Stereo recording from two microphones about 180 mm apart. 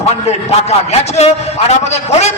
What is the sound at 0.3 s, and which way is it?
A man's voice, 35° left (ahead or behind).